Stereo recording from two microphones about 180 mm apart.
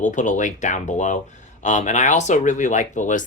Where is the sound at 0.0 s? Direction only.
45° left (ahead or behind).